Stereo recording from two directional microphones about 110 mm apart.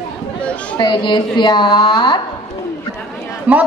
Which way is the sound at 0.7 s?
45° left (ahead or behind).